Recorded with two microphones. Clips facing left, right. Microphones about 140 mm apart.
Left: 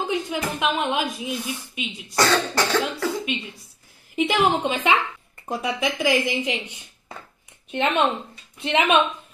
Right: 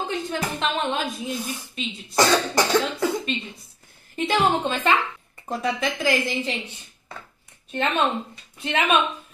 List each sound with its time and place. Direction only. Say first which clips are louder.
0.1 s a woman's voice: left 2 dB; 10° left (ahead or behind)
2.1 s cough: right 1 dB; 15° right (ahead or behind)
4.1 s a woman's voice: left 1 dB; 15° left (ahead or behind)
7.7 s a woman's voice: left 2 dB; 20° left (ahead or behind)